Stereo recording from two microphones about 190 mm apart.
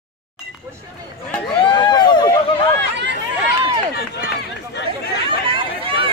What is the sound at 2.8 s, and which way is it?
Chatter, 65° right (ahead or behind).